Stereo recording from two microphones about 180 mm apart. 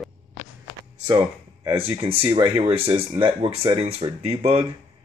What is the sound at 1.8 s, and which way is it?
Speech, 30° right (ahead or behind).